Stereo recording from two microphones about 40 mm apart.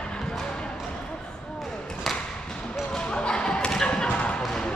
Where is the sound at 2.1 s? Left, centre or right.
Centre.